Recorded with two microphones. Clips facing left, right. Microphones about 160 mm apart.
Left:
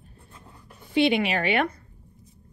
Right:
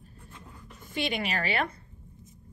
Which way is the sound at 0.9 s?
45° right (ahead or behind).